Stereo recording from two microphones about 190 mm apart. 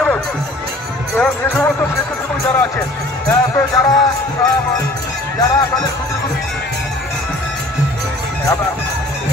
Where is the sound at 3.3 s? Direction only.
15° left (ahead or behind).